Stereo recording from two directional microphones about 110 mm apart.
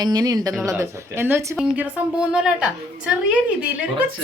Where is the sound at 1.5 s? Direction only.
10° right (ahead or behind).